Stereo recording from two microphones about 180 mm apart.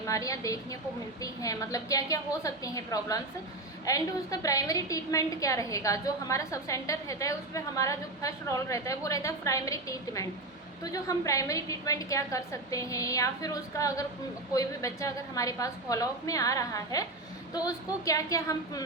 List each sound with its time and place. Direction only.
0.0 s a woman's voice: 20° left (ahead or behind)